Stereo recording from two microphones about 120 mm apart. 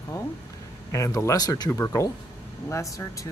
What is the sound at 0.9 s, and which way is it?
Speech, 25° left (ahead or behind).